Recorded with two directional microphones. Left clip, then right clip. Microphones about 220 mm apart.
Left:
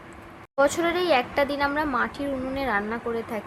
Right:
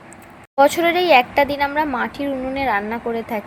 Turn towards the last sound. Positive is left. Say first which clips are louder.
# right 6 dB
turn(degrees=-15)  # may be behind; listen again after turning